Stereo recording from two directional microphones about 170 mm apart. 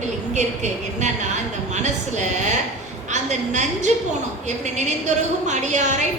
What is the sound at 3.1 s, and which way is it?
A woman's voice, 45° right (ahead or behind).